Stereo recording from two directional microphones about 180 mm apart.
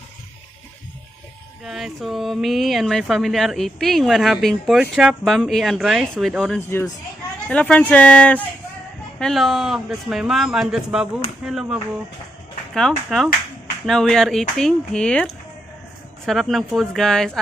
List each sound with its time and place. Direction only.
1.6 s speech: centre (ahead or behind)
6.7 s speech: 15° left (ahead or behind)